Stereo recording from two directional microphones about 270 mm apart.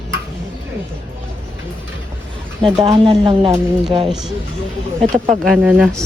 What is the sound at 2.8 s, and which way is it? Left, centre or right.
Speech, centre.